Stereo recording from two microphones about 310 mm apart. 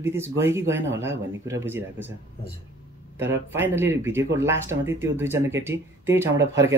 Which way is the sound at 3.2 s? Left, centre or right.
Centre.